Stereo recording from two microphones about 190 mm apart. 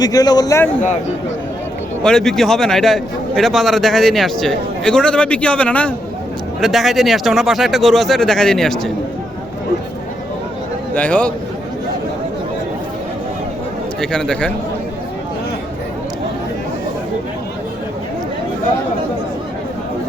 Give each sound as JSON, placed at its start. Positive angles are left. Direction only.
{"t": 0.0, "sound": "a man's voice", "side_deg": 20}
{"t": 2.0, "sound": "a man's voice", "side_deg": 5}
{"t": 10.9, "sound": "speech", "side_deg": 5}
{"t": 14.0, "sound": "a man's voice", "side_deg": 5}